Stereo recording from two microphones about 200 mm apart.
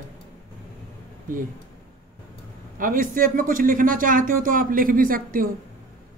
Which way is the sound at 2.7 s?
45° right (ahead or behind).